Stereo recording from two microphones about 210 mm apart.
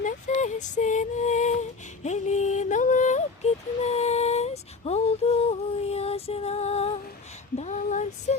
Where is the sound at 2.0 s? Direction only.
35° left (ahead or behind).